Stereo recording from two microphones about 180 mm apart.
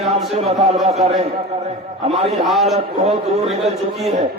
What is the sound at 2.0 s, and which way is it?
Speech, 35° right (ahead or behind).